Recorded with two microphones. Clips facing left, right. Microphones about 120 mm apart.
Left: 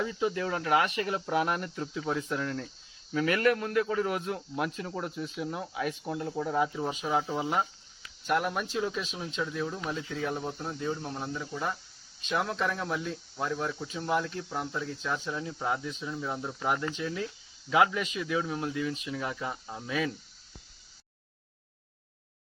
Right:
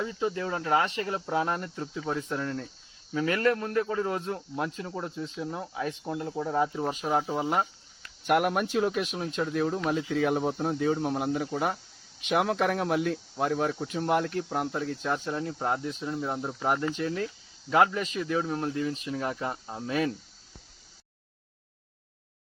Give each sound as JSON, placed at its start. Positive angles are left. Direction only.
{"t": 0.0, "sound": "speech", "side_deg": -25}
{"t": 2.3, "sound": "speech", "side_deg": -25}
{"t": 6.9, "sound": "speech", "side_deg": 0}
{"t": 8.3, "sound": "speech", "side_deg": -65}
{"t": 16.2, "sound": "speech", "side_deg": -25}
{"t": 16.9, "sound": "speech", "side_deg": -45}